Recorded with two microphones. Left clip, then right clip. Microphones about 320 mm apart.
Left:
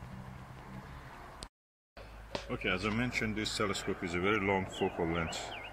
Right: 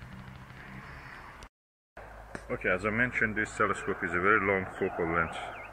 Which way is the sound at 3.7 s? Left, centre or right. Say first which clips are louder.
Right 5 dB; right.